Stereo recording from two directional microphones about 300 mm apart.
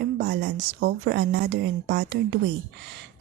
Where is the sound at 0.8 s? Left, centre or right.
Right.